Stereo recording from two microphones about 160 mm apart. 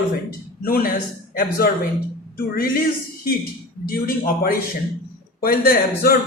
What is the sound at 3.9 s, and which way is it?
A man's voice, 65° left (ahead or behind).